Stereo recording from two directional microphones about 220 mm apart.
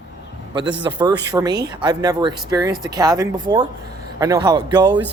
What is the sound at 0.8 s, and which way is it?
Speech, 20° right (ahead or behind).